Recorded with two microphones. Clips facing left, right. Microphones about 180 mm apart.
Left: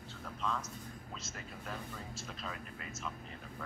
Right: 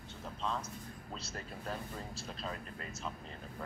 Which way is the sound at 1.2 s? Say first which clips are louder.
Right 2 dB; 35° right (ahead or behind).